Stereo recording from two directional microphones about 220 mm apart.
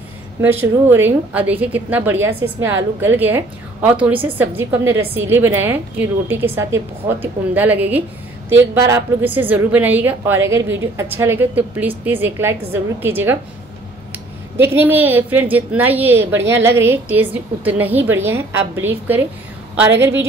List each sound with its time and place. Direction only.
0.4 s a woman's voice: 10° right (ahead or behind)
14.6 s a woman's voice: 10° right (ahead or behind)